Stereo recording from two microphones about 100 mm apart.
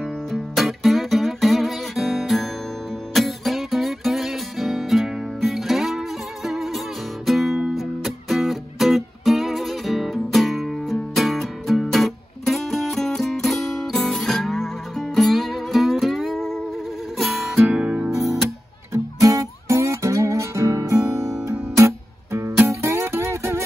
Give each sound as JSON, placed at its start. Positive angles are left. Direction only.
{"t": 0.0, "sound": "music", "side_deg": 0}
{"t": 3.1, "sound": "guitar", "side_deg": 0}
{"t": 7.2, "sound": "music", "side_deg": 0}
{"t": 17.6, "sound": "music", "side_deg": -10}
{"t": 19.2, "sound": "music", "side_deg": -30}